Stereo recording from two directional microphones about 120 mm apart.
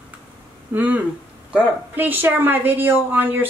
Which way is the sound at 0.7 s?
15° right (ahead or behind).